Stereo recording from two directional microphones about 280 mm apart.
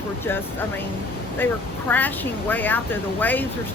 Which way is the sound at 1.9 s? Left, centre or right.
Centre.